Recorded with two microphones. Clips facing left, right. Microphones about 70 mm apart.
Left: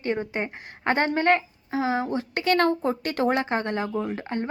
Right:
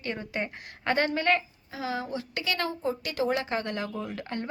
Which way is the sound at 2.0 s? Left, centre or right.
Left.